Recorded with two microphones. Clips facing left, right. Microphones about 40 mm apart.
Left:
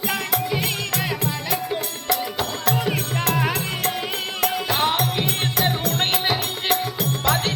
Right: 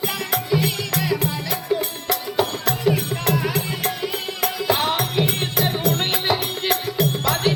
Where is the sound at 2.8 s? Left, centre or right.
Left.